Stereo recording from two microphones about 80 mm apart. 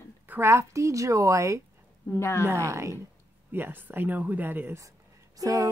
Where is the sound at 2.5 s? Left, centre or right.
Right.